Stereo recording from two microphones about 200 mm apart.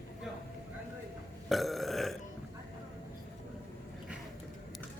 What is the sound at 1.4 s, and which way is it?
Burping, centre (ahead or behind).